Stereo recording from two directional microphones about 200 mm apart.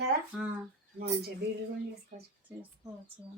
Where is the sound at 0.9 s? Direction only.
55° right (ahead or behind).